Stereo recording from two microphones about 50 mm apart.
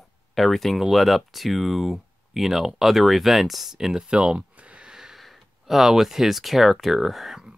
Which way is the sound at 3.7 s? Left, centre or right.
Centre.